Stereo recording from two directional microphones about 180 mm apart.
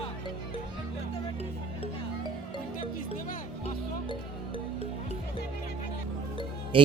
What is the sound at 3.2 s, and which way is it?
Music, 50° left (ahead or behind).